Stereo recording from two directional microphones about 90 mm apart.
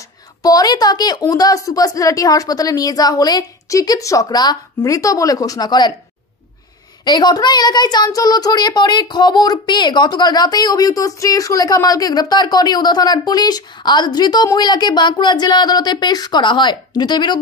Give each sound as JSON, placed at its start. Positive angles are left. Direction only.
{"t": 0.4, "sound": "speech", "side_deg": 45}
{"t": 4.8, "sound": "speech", "side_deg": 40}
{"t": 7.1, "sound": "speech", "side_deg": 50}